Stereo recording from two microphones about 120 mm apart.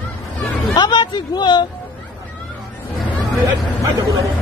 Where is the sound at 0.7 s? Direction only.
40° left (ahead or behind).